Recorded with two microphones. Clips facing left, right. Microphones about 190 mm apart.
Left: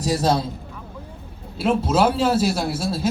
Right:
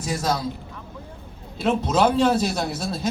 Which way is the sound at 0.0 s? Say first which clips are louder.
Left 5 dB; 35° left (ahead or behind).